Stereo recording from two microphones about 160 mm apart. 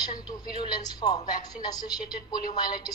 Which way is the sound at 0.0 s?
25° left (ahead or behind).